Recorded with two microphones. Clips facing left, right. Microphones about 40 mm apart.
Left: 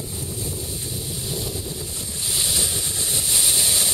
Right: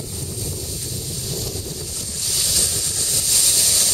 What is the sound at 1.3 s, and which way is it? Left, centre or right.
Wind noise, left.